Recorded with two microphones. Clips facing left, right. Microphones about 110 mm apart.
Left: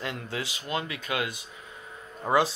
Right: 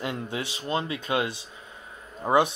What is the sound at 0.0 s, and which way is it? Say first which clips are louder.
Speech: right 3 dB; 20° right (ahead or behind).